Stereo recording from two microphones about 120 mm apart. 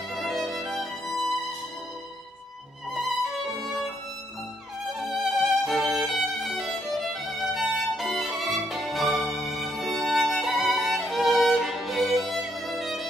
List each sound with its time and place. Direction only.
0.1 s violin: centre (ahead or behind)
3.2 s violin: centre (ahead or behind)
5.0 s music: centre (ahead or behind)